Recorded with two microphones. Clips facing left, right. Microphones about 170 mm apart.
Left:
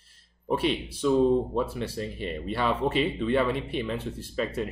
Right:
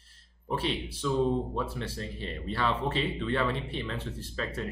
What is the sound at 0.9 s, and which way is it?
Speech, 15° left (ahead or behind).